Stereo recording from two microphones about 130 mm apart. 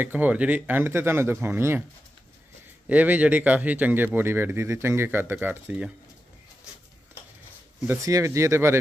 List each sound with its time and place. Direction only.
0.0 s speech: 15° right (ahead or behind)
2.9 s speech: 10° right (ahead or behind)
7.8 s speech: 20° right (ahead or behind)